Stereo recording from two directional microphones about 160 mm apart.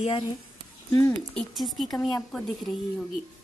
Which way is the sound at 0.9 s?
15° left (ahead or behind).